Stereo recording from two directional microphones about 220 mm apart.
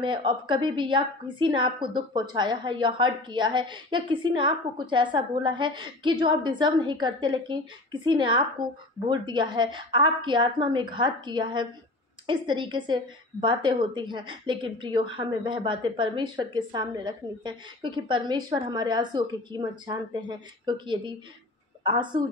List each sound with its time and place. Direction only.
0.0 s a woman's voice: 20° right (ahead or behind)